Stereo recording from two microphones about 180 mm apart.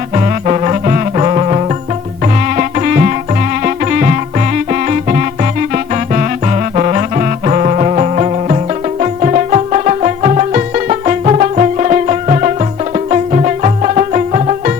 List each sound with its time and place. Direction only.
0.4 s music: 35° right (ahead or behind)
2.6 s music: 50° right (ahead or behind)
4.5 s music: 50° right (ahead or behind)
6.7 s music: 40° right (ahead or behind)